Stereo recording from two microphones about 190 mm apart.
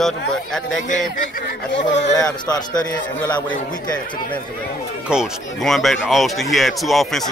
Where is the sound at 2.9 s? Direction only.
10° left (ahead or behind).